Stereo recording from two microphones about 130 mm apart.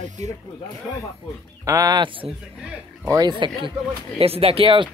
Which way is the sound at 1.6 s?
25° right (ahead or behind).